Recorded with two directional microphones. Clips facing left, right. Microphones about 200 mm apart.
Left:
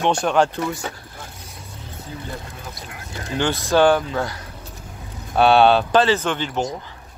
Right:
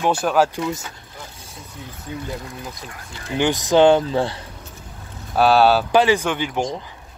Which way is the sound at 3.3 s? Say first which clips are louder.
Right 2 dB; 15° right (ahead or behind).